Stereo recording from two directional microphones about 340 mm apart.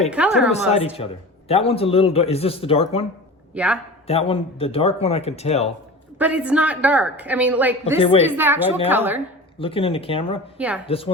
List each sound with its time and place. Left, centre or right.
0.1 s a woman's voice: centre
0.9 s a man's voice: centre
3.5 s speech: centre
4.0 s a man's voice: centre
6.1 s a woman's voice: centre
7.9 s a man's voice: centre
8.3 s a woman's voice: centre
9.6 s a man's voice: centre